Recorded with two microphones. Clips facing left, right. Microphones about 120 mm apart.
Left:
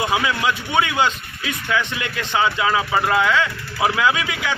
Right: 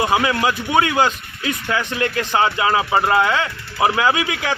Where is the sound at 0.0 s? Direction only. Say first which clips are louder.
Right 3 dB; 35° right (ahead or behind).